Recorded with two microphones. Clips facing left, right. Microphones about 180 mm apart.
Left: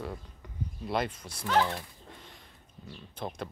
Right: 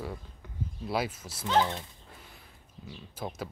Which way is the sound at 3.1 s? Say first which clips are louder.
Even; 5° right (ahead or behind).